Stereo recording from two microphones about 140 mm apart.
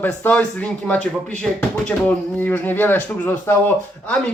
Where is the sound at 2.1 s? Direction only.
15° left (ahead or behind).